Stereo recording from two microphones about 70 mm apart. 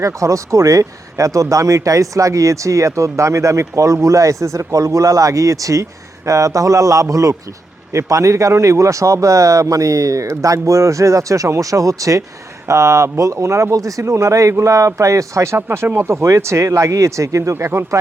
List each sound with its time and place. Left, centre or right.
0.0 s speech: right